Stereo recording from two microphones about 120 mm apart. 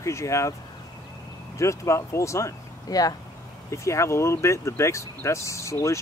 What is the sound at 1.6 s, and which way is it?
Speech, 25° left (ahead or behind).